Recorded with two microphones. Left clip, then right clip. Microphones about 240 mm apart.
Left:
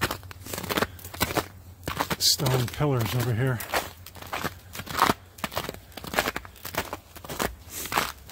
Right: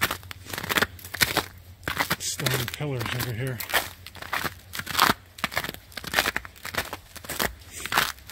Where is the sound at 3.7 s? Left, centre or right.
Centre.